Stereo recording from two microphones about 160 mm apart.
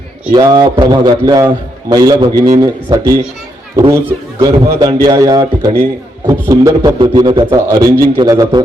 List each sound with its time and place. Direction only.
0.3 s a man's voice: 25° right (ahead or behind)